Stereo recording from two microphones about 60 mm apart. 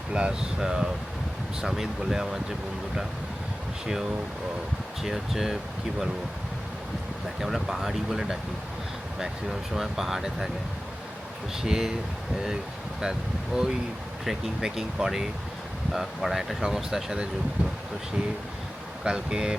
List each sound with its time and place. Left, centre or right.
0.1 s speech: centre
5.0 s speech: centre
7.4 s speech: centre
11.6 s speech: centre
13.0 s speech: centre
19.0 s speech: centre